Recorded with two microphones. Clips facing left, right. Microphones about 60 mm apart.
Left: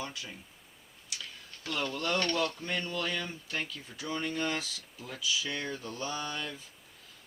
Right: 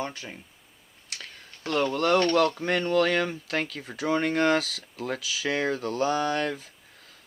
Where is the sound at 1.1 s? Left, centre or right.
Right.